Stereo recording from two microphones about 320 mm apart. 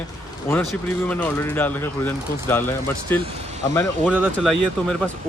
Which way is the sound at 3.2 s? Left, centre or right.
Centre.